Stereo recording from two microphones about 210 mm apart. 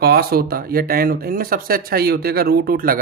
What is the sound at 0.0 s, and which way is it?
Speech, 50° right (ahead or behind).